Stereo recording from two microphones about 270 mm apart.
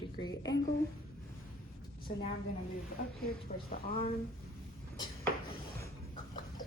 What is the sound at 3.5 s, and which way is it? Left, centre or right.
Speech, left.